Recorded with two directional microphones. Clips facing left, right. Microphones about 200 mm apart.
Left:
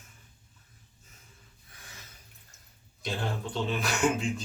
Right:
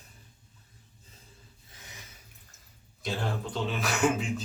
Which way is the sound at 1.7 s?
20° right (ahead or behind).